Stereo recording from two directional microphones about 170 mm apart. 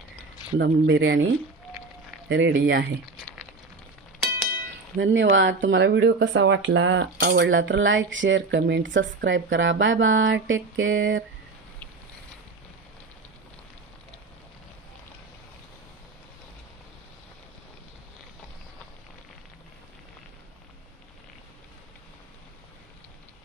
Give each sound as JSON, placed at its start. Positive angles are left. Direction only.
{"t": 0.6, "sound": "speech", "side_deg": -90}
{"t": 2.2, "sound": "speech", "side_deg": -90}
{"t": 4.9, "sound": "speech", "side_deg": -90}